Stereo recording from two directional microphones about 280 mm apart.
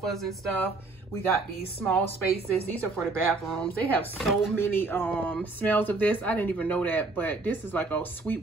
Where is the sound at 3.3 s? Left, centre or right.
Centre.